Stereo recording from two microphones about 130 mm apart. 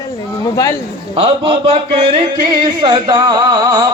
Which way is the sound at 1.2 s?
50° right (ahead or behind).